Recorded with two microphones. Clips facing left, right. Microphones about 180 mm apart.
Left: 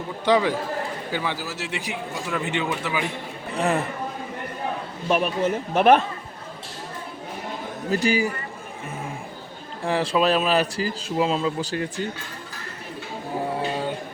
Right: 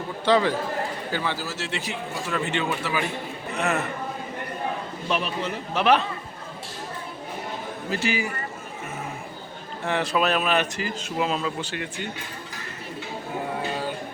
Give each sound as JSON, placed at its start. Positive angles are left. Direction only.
{"t": 0.3, "sound": "a man's voice", "side_deg": 10}
{"t": 3.5, "sound": "a man's voice", "side_deg": 30}
{"t": 5.0, "sound": "speech", "side_deg": 50}
{"t": 7.9, "sound": "a man's voice", "side_deg": 40}
{"t": 9.8, "sound": "a man's voice", "side_deg": 30}
{"t": 13.6, "sound": "music", "side_deg": 25}